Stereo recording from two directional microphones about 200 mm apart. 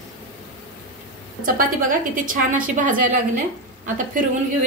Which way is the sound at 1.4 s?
40° right (ahead or behind).